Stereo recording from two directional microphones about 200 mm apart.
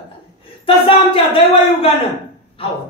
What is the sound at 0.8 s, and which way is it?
A man's voice, 25° left (ahead or behind).